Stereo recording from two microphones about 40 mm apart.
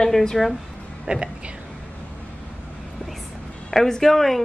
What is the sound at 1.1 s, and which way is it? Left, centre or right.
Speech, right.